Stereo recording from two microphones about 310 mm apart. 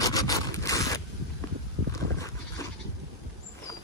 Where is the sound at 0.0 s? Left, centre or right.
Centre.